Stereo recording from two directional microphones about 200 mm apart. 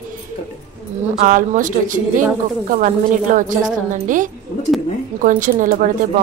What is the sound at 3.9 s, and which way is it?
Speech, 40° right (ahead or behind).